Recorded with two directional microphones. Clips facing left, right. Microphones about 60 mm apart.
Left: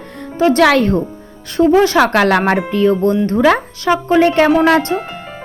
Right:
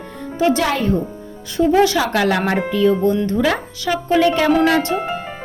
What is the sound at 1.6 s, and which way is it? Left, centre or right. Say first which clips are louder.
Speech: left 4 dB; left.